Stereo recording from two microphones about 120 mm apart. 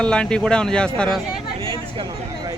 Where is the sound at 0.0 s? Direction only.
10° left (ahead or behind).